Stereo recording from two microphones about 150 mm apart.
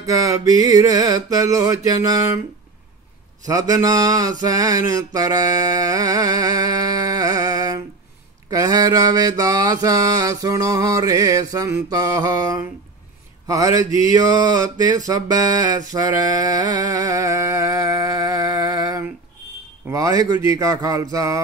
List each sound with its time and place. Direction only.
0.0 s mantra: 20° right (ahead or behind)
3.4 s mantra: 25° right (ahead or behind)